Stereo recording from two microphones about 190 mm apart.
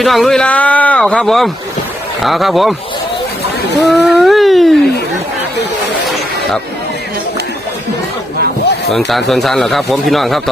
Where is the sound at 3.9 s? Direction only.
Centre (ahead or behind).